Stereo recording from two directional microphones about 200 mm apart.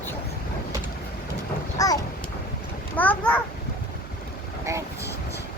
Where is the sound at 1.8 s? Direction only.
15° left (ahead or behind).